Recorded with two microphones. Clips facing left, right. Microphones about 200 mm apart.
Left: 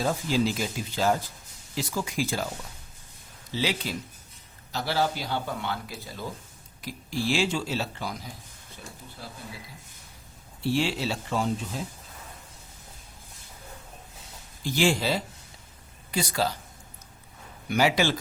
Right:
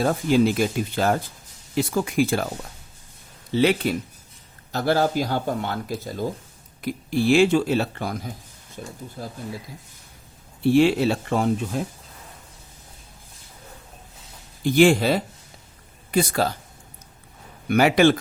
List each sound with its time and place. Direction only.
0.0 s speech: 60° right (ahead or behind)
3.5 s speech: 60° right (ahead or behind)
6.8 s speech: 60° right (ahead or behind)
9.2 s speech: 40° right (ahead or behind)
10.6 s speech: 55° right (ahead or behind)
14.6 s speech: 55° right (ahead or behind)
17.7 s speech: 55° right (ahead or behind)